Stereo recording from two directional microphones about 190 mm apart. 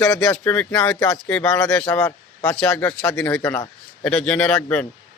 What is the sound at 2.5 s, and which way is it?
Speech, 5° left (ahead or behind).